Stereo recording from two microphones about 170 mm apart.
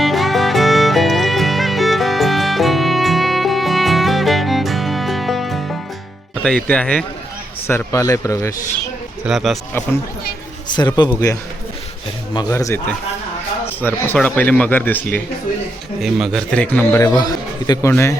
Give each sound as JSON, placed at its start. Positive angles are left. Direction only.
{"t": 0.0, "sound": "music", "side_deg": 0}
{"t": 6.4, "sound": "a man's voice", "side_deg": 5}
{"t": 9.2, "sound": "speech", "side_deg": 0}
{"t": 10.7, "sound": "a man's voice", "side_deg": 25}
{"t": 12.3, "sound": "a man's voice", "side_deg": 20}
{"t": 13.8, "sound": "a man's voice", "side_deg": 10}
{"t": 16.0, "sound": "a man's voice", "side_deg": 0}